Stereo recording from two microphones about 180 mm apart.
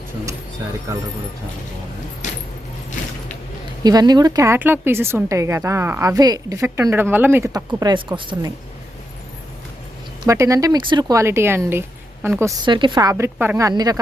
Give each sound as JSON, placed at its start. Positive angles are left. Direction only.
{"t": 2.2, "sound": "keys jangling", "side_deg": 40}
{"t": 3.8, "sound": "a woman's voice", "side_deg": -20}
{"t": 10.2, "sound": "a woman's voice", "side_deg": -15}
{"t": 12.6, "sound": "a woman's voice", "side_deg": -25}